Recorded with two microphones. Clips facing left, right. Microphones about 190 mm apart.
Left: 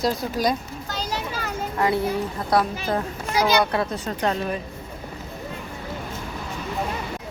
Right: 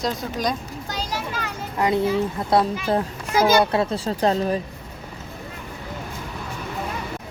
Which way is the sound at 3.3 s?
45° right (ahead or behind).